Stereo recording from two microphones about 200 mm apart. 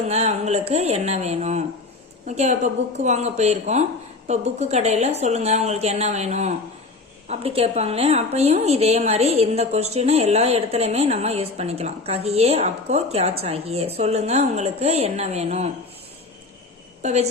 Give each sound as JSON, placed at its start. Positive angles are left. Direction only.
{"t": 0.0, "sound": "a woman's voice", "side_deg": -30}
{"t": 17.0, "sound": "a woman's voice", "side_deg": -35}